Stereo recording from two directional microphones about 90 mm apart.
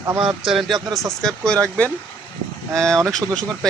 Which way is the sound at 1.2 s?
10° left (ahead or behind).